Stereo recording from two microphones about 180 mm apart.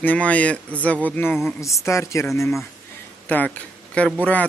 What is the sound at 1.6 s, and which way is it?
Speech, 15° left (ahead or behind).